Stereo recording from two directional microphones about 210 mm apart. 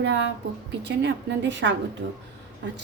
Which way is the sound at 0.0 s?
55° right (ahead or behind).